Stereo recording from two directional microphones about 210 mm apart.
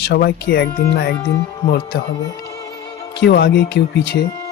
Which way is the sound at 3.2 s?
50° left (ahead or behind).